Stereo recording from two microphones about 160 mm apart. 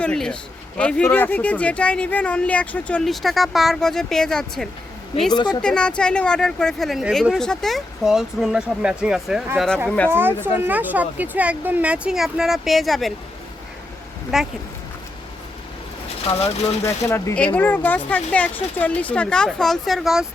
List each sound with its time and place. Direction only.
0.0 s speech: 5° left (ahead or behind)
5.3 s a woman's voice: 25° left (ahead or behind)
5.6 s speech: 5° left (ahead or behind)
10.1 s speech: 15° right (ahead or behind)
14.3 s speech: centre (ahead or behind)
16.4 s speech: 15° left (ahead or behind); by 20.2 s centre (ahead or behind)